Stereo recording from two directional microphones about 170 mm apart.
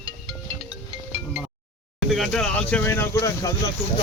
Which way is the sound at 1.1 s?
10° right (ahead or behind).